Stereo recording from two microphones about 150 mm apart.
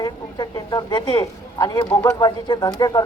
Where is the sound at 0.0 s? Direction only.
25° left (ahead or behind).